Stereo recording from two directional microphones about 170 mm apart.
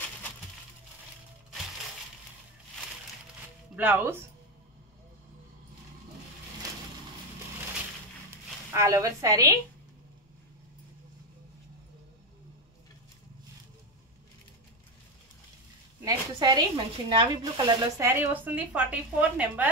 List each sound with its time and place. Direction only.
3.7 s speech: 10° right (ahead or behind)
8.7 s a woman's voice: 20° right (ahead or behind)
16.0 s speech: 20° right (ahead or behind)